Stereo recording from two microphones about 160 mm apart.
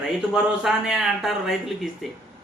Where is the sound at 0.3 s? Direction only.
Centre (ahead or behind).